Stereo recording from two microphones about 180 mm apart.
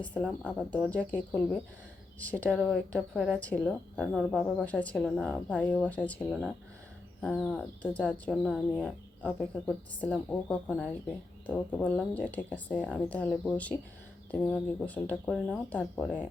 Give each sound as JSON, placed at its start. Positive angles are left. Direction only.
{"t": 0.0, "sound": "speech", "side_deg": 5}